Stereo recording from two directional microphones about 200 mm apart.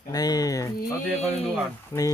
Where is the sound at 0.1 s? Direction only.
20° left (ahead or behind).